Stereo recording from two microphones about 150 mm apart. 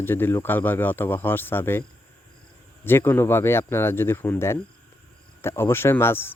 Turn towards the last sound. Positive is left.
turn(degrees=15)  # may be behind; listen again after turning